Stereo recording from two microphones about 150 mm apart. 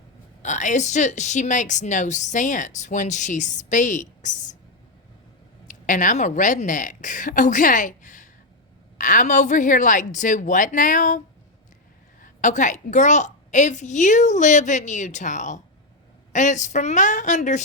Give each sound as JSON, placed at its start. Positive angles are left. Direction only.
{"t": 0.4, "sound": "a woman's voice", "side_deg": 55}
{"t": 5.6, "sound": "a woman's voice", "side_deg": 60}
{"t": 12.2, "sound": "a woman's voice", "side_deg": 55}